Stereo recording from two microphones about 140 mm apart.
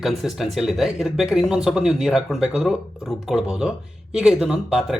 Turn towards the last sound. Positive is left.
turn(degrees=-5)  # may be behind; listen again after turning